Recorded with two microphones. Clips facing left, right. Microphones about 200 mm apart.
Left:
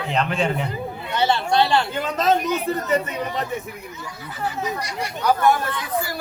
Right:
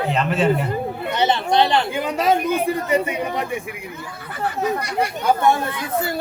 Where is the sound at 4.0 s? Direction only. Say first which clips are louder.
Right 2 dB; 55° right (ahead or behind).